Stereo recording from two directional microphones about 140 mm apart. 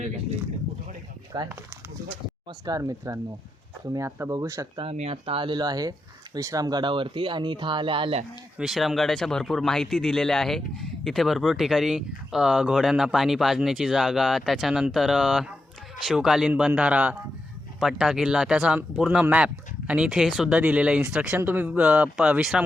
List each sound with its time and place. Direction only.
1.3 s speech: 35° right (ahead or behind)
2.6 s speech: 25° right (ahead or behind)
4.8 s speech: 45° right (ahead or behind)
8.5 s speech: centre (ahead or behind)